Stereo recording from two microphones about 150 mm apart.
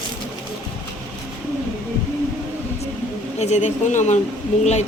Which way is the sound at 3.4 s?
50° left (ahead or behind).